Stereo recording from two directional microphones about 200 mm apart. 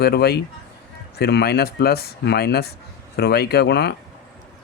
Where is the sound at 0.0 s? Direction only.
50° left (ahead or behind).